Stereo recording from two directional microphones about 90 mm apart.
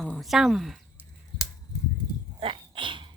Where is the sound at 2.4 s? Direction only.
75° right (ahead or behind).